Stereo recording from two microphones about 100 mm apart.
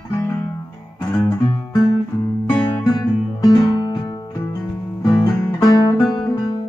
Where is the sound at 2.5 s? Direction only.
45° left (ahead or behind).